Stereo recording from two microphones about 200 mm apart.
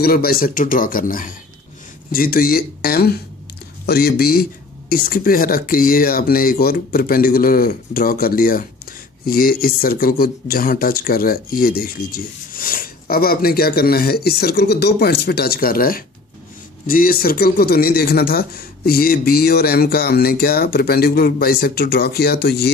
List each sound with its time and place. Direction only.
0.0 s speech: 50° left (ahead or behind)